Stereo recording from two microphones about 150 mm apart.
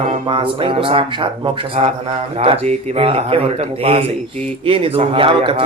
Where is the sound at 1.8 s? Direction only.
45° right (ahead or behind).